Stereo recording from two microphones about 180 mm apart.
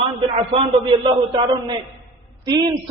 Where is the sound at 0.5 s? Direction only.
30° right (ahead or behind).